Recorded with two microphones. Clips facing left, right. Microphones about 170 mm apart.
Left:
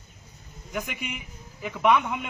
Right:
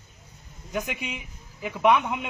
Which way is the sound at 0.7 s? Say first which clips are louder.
Right 2 dB; 15° right (ahead or behind).